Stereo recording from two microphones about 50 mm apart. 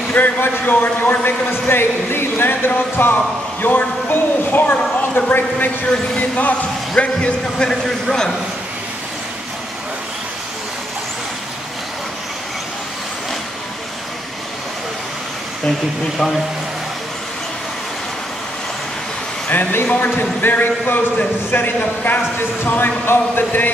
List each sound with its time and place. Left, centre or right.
0.1 s a man's voice: left
6.1 s a man's voice: left; by 8.4 s centre
19.5 s a man's voice: left